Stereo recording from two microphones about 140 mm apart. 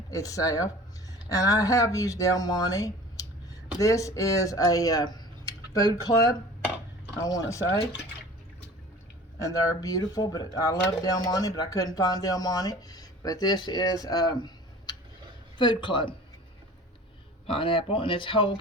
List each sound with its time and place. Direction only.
0.1 s speech: 25° left (ahead or behind)
9.4 s speech: 25° left (ahead or behind)
17.4 s speech: 40° left (ahead or behind)